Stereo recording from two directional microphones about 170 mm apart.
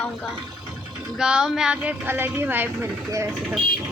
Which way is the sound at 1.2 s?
5° right (ahead or behind).